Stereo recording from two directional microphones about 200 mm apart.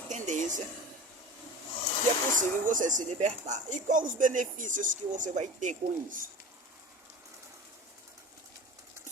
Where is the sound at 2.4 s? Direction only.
40° right (ahead or behind).